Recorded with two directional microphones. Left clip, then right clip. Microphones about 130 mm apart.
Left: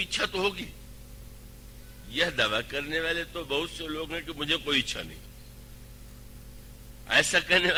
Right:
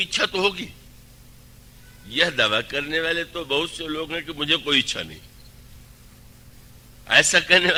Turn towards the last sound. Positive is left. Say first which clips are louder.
# right 6 dB
turn(degrees=45)  # may be behind; listen again after turning